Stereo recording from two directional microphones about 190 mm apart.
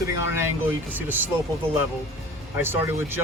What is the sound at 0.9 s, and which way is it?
Speech, 10° right (ahead or behind).